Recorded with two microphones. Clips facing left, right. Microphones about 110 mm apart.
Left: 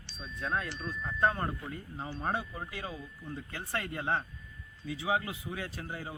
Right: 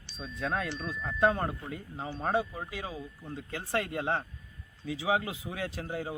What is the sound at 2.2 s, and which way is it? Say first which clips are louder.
Speech: right 5 dB; 90° right.